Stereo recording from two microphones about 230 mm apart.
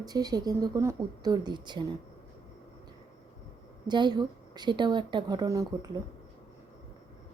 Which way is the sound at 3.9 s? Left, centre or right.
Centre.